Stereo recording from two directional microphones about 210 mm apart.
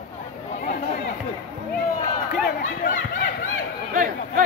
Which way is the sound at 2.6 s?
40° left (ahead or behind).